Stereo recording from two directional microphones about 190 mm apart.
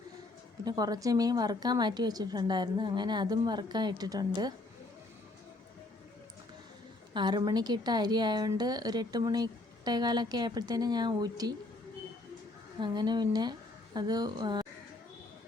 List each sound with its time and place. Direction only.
0.6 s a woman's voice: 20° right (ahead or behind)
7.1 s a woman's voice: 25° right (ahead or behind)
12.8 s a woman's voice: 20° right (ahead or behind)